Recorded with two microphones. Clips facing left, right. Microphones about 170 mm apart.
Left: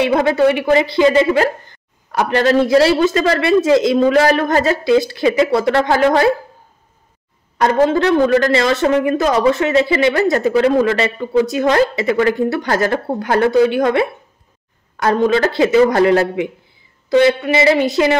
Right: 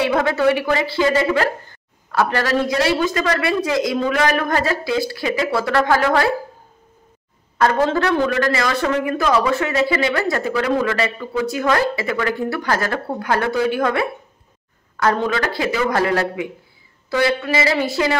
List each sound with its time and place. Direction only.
0.0 s speech: 20° left (ahead or behind)
7.6 s speech: 20° left (ahead or behind)
8.1 s speech: 30° left (ahead or behind)
9.2 s speech: 40° left (ahead or behind)
9.5 s speech: 20° left (ahead or behind)